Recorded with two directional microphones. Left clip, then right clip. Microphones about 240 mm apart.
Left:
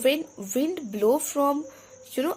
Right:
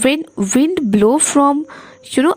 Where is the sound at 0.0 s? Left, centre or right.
Right.